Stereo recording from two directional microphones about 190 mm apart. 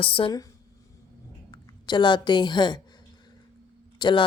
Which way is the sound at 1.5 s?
25° left (ahead or behind).